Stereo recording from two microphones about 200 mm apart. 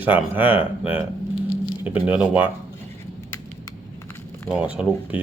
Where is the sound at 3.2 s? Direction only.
10° left (ahead or behind).